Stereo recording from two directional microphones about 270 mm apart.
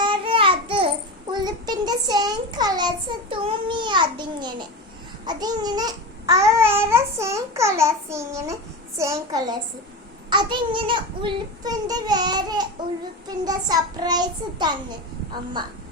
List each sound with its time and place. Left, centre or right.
0.0 s babbling: centre
1.3 s a sound: centre
5.2 s babbling: centre
9.0 s a child's voice: centre